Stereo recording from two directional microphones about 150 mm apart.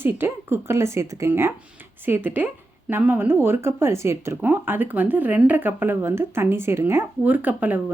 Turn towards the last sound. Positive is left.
turn(degrees=-10)  # may be behind; listen again after turning